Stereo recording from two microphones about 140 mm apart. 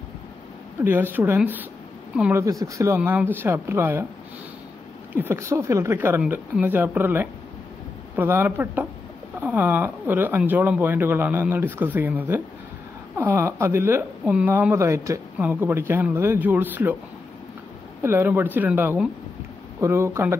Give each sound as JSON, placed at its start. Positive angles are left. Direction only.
{"t": 0.8, "sound": "speech", "side_deg": -15}
{"t": 3.0, "sound": "speech", "side_deg": -10}
{"t": 5.1, "sound": "speech", "side_deg": -15}
{"t": 18.0, "sound": "speech", "side_deg": -15}